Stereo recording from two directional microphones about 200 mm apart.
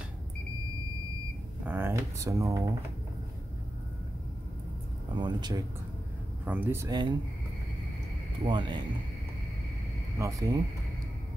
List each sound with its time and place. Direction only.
1.7 s speech: 10° right (ahead or behind)
5.1 s speech: 20° right (ahead or behind)
6.4 s speech: 10° right (ahead or behind)
8.5 s speech: 25° right (ahead or behind)
10.1 s speech: 15° right (ahead or behind)